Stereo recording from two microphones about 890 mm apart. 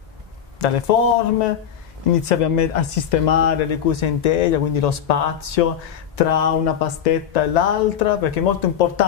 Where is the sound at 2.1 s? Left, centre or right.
Left.